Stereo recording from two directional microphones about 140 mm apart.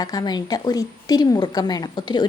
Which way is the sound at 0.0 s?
30° left (ahead or behind).